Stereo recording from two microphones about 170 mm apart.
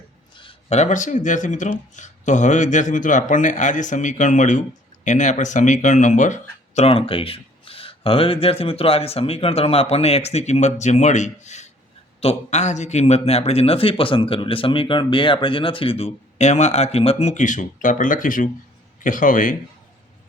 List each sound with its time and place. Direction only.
0.3 s a man's voice: 35° left (ahead or behind); by 19.5 s 50° left (ahead or behind)